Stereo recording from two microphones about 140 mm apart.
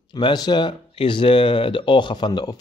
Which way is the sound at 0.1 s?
30° left (ahead or behind).